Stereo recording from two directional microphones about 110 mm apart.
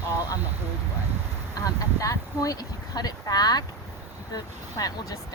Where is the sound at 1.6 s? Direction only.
30° left (ahead or behind).